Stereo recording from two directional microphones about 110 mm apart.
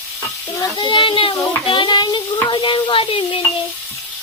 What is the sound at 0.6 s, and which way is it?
Child singing, 45° left (ahead or behind).